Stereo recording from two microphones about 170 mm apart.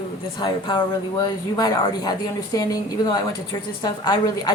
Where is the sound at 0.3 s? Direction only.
25° left (ahead or behind).